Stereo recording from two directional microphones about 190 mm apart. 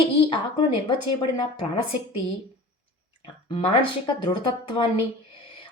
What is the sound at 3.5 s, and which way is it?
Speech, 25° left (ahead or behind).